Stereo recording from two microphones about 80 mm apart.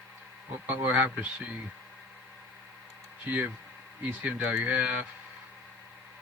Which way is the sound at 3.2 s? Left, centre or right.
Right.